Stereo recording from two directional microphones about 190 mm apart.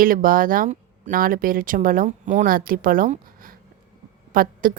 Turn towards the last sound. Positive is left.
turn(degrees=-50)  # may be behind; listen again after turning